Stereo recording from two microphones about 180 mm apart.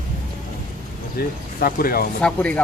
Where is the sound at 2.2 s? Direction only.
5° left (ahead or behind).